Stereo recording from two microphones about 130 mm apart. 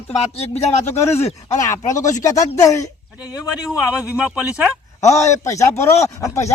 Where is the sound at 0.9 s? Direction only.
20° left (ahead or behind).